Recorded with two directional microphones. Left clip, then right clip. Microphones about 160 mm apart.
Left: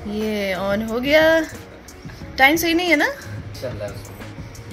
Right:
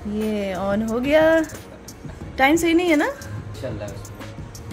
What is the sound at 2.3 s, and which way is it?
Speech, 15° right (ahead or behind).